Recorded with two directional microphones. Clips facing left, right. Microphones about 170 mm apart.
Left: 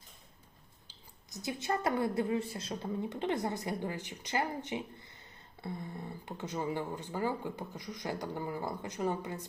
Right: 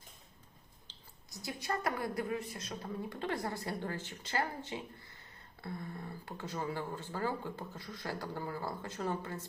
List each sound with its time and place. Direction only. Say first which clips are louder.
1.3 s a woman's voice: left 4 dB; 20° left (ahead or behind)